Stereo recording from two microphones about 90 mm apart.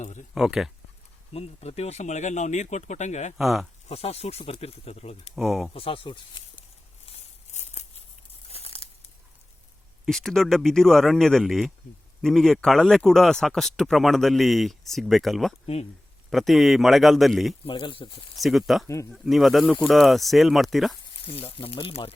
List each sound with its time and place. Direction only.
0.3 s speech: 5° right (ahead or behind)
1.3 s speech: 90° left
3.3 s speech: centre (ahead or behind)
3.9 s speech: 90° left
5.3 s speech: centre (ahead or behind)
5.7 s speech: 90° left; by 6.7 s 65° left (ahead or behind)
8.4 s crumpling: 90° left
10.1 s speech: 5° left (ahead or behind)
17.6 s speech: 70° left (ahead or behind)
18.3 s speech: centre (ahead or behind)
21.0 s speech: 85° left